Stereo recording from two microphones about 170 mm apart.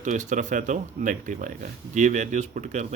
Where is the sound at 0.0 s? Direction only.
45° right (ahead or behind).